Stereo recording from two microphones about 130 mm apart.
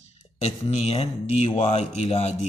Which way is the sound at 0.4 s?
60° left (ahead or behind).